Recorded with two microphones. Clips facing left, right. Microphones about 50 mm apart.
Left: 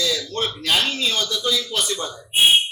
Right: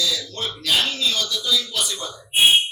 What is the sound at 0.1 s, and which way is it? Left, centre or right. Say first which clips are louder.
Speech: left 3 dB; left.